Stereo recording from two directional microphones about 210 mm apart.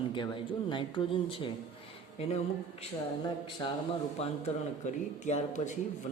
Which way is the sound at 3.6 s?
20° left (ahead or behind).